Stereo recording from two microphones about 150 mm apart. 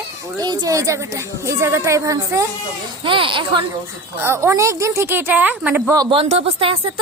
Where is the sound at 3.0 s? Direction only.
35° right (ahead or behind).